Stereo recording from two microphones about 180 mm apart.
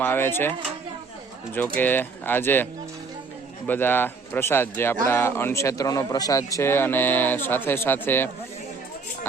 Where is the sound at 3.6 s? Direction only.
10° left (ahead or behind).